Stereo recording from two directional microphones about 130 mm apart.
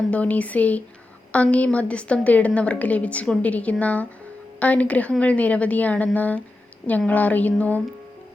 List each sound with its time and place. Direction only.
0.1 s a woman's voice: 10° left (ahead or behind)